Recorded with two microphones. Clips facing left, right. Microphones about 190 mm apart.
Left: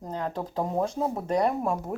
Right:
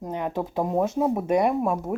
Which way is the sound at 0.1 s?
15° right (ahead or behind).